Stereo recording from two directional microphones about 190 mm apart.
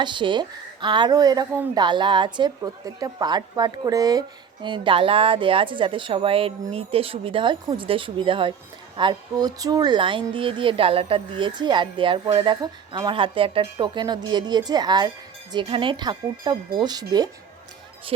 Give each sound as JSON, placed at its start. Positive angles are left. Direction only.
{"t": 0.0, "sound": "speech", "side_deg": -25}